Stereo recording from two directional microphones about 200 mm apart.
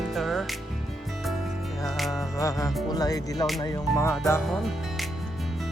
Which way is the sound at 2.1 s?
15° left (ahead or behind).